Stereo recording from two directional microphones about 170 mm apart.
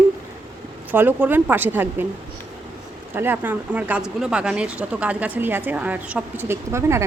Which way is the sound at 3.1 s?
10° right (ahead or behind).